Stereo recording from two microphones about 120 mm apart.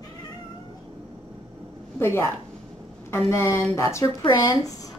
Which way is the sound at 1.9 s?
20° left (ahead or behind).